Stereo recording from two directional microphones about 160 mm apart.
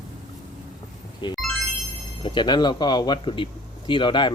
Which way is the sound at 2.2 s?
30° left (ahead or behind).